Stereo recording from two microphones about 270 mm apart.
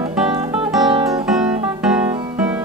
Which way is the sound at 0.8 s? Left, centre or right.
Centre.